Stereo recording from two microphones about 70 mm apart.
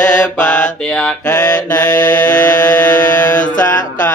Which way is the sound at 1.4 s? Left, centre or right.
Left.